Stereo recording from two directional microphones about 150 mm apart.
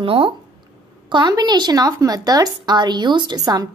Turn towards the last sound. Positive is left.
turn(degrees=-25)  # may be behind; listen again after turning